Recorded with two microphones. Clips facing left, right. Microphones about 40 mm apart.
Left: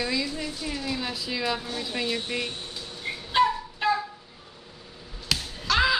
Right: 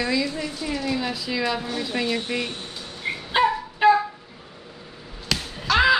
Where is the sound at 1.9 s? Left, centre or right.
Centre.